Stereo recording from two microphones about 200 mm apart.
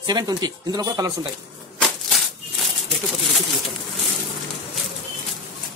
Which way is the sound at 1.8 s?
Centre (ahead or behind).